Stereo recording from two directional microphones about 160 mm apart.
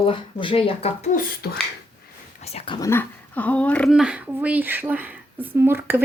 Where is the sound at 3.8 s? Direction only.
5° right (ahead or behind).